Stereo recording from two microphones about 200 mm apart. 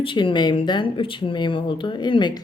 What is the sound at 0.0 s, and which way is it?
Speech, 25° left (ahead or behind).